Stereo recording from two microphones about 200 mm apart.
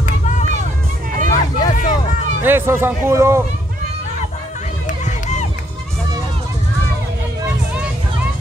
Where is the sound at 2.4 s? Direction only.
10° right (ahead or behind).